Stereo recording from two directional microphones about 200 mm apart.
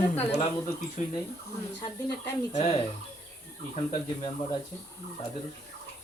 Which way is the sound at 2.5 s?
35° left (ahead or behind).